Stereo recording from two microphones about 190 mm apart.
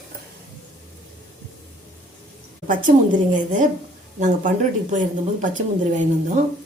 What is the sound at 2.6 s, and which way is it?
A woman's voice, 45° right (ahead or behind).